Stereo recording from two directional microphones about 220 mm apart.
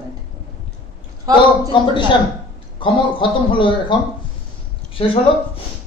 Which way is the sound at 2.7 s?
20° left (ahead or behind).